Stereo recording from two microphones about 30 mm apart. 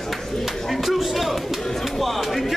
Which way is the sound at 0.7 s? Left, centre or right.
Centre.